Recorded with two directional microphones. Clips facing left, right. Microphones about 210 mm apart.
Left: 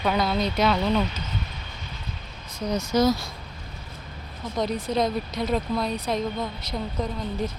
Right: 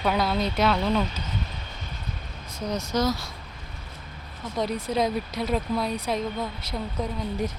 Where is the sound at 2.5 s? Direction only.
Centre (ahead or behind).